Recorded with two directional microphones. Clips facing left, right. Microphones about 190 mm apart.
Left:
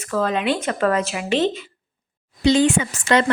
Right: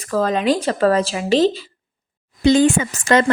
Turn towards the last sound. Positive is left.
turn(degrees=-45)  # may be behind; listen again after turning